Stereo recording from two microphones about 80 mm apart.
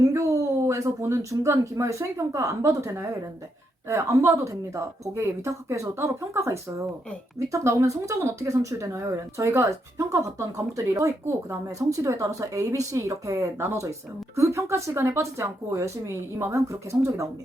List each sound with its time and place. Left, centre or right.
0.0 s a woman's voice: right